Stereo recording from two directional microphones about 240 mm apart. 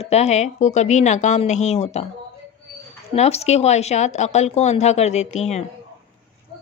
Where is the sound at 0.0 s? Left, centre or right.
Left.